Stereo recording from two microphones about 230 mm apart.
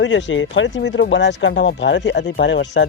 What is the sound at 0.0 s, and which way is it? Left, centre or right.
Speech, left.